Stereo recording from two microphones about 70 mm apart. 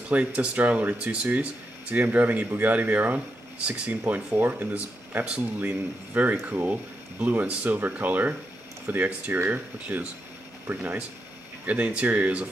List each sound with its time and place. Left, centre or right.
0.1 s speech: centre
4.1 s speech: right